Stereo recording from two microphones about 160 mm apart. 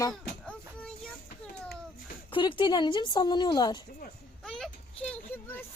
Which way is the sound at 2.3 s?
30° left (ahead or behind).